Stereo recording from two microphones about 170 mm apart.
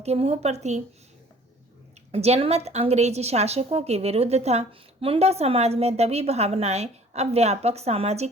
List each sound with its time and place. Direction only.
0.0 s a woman's voice: 40° right (ahead or behind)
2.1 s a woman's voice: 35° right (ahead or behind)